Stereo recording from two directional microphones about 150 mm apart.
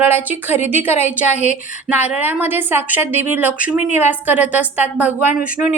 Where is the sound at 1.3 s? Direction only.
50° left (ahead or behind).